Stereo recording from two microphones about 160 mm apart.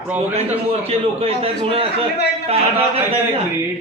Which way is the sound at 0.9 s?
40° right (ahead or behind).